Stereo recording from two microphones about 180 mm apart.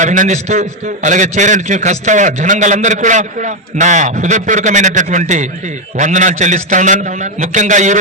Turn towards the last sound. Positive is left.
turn(degrees=-40)  # may be behind; listen again after turning